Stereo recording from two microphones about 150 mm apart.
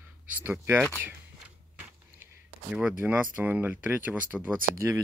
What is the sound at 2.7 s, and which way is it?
Speech, 10° right (ahead or behind).